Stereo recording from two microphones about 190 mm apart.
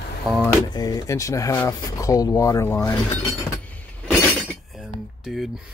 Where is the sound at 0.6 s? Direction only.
20° left (ahead or behind).